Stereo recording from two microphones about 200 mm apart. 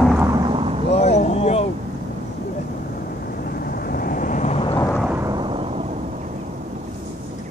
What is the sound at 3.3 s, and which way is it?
Vehicle, 50° left (ahead or behind).